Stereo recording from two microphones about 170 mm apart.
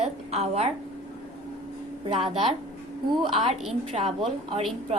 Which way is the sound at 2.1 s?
40° right (ahead or behind).